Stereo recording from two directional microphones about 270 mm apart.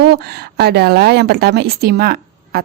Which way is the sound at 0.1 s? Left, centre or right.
Right.